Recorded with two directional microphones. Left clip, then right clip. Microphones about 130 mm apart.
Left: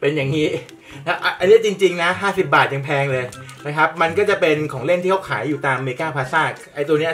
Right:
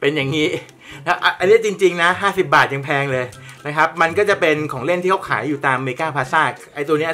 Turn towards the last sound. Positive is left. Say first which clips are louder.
# even
turn(degrees=-40)  # may be behind; listen again after turning